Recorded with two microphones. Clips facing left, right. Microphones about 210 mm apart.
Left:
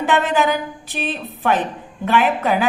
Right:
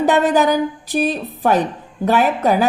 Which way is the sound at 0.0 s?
40° right (ahead or behind).